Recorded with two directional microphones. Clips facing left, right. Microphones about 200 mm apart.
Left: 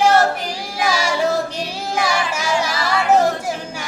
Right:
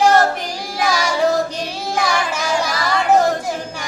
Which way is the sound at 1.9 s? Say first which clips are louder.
Right 1 dB; 10° left (ahead or behind).